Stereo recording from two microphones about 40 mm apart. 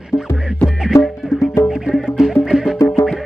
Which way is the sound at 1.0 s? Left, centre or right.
Centre.